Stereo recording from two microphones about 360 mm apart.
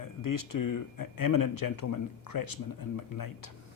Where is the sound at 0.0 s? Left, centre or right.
Left.